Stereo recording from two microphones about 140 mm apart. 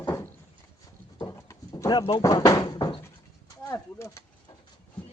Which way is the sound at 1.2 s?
20° left (ahead or behind).